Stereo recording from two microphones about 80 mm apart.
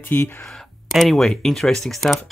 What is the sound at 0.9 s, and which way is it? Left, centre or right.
Speech, centre.